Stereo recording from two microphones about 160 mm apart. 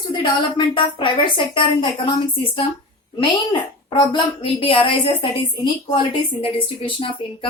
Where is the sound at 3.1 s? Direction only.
30° left (ahead or behind).